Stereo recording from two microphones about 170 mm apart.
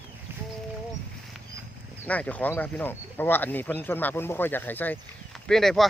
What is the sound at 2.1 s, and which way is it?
Speech, 10° left (ahead or behind).